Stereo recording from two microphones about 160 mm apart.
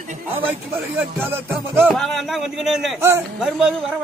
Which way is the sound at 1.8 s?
5° left (ahead or behind).